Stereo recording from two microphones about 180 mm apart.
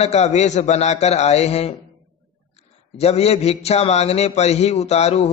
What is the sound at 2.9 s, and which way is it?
Speech, 35° left (ahead or behind).